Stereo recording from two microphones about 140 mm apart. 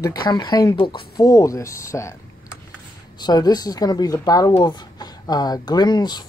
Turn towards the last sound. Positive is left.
turn(degrees=30)  # may be behind; listen again after turning